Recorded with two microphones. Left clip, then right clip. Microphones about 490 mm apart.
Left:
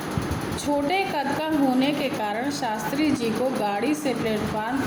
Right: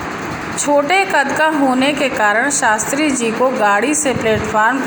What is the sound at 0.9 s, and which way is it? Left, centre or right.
A woman's voice, left.